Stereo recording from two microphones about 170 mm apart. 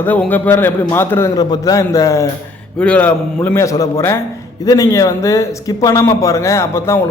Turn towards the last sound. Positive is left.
turn(degrees=15)  # may be behind; listen again after turning